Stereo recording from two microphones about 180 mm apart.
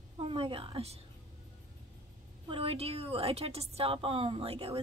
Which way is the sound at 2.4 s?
30° right (ahead or behind).